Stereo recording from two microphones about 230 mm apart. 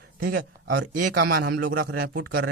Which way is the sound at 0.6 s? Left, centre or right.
Right.